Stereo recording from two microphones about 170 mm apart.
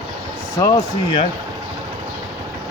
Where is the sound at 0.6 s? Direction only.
25° left (ahead or behind).